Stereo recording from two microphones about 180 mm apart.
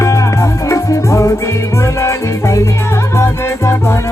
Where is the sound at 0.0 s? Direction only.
15° left (ahead or behind).